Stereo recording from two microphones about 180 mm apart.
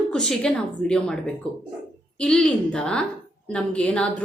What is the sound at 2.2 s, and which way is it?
A woman's voice, 5° left (ahead or behind).